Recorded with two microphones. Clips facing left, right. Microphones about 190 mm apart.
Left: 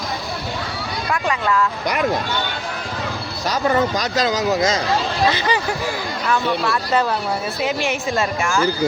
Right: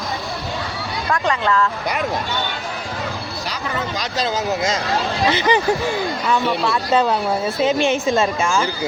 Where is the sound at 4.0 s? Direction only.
40° left (ahead or behind).